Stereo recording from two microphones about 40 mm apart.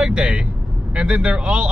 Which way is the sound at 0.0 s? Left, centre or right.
Right.